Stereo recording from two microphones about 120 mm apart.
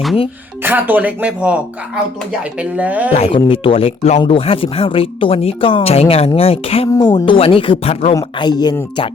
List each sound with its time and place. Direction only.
0.6 s speech: 15° right (ahead or behind)
3.1 s speech: 65° left (ahead or behind)
3.3 s speech: 50° left (ahead or behind)
6.9 s speech: 40° left (ahead or behind)
8.1 s speech: 35° left (ahead or behind)